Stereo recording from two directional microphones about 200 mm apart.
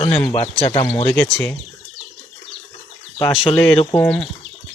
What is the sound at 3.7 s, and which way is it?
Speech, 20° left (ahead or behind).